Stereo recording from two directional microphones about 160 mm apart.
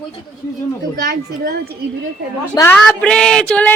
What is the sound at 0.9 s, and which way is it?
Speech, 80° right.